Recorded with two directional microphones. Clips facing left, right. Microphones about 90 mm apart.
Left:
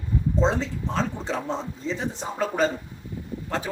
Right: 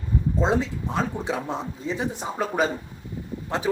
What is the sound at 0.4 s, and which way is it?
Speech, 10° right (ahead or behind).